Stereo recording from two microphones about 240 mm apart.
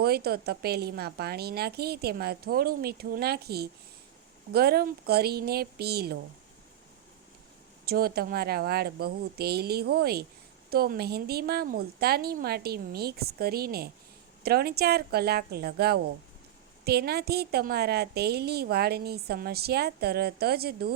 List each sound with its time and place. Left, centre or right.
0.0 s a woman's voice: right
7.9 s a woman's voice: right